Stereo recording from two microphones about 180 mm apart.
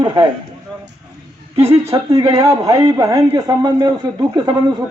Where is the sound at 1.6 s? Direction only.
15° right (ahead or behind).